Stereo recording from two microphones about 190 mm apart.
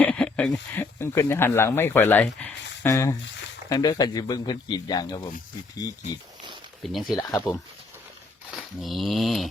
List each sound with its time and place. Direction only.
0.0 s speech: 5° left (ahead or behind)
6.8 s speech: centre (ahead or behind)
8.5 s a sound: centre (ahead or behind)